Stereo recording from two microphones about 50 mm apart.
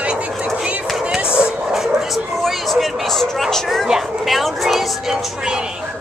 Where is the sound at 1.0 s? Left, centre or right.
Centre.